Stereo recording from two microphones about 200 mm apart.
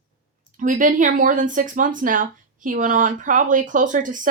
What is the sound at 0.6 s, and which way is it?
A woman's voice, 40° right (ahead or behind).